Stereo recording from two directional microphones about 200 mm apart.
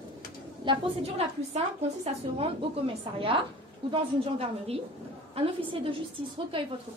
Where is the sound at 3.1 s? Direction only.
25° right (ahead or behind).